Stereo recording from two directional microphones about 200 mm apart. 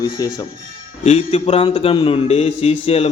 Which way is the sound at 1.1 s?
35° left (ahead or behind).